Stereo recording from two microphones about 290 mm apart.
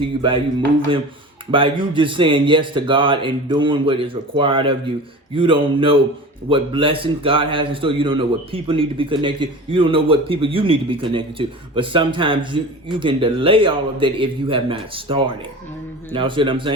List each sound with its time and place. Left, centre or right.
0.2 s a man's voice: centre
1.5 s a man's voice: centre